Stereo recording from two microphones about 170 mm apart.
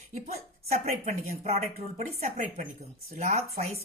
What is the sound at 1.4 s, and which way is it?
Speech, 40° right (ahead or behind).